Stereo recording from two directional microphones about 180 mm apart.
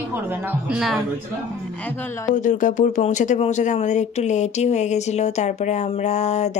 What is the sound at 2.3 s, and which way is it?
Speech, 45° left (ahead or behind).